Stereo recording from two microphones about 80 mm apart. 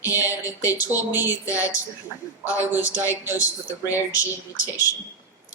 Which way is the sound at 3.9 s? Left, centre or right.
Left.